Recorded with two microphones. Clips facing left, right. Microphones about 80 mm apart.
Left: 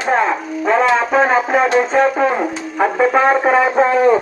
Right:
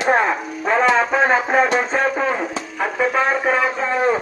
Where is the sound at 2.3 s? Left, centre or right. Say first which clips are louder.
Left 4 dB; centre.